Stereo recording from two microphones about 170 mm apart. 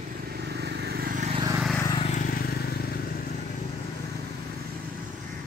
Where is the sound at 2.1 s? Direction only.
55° left (ahead or behind).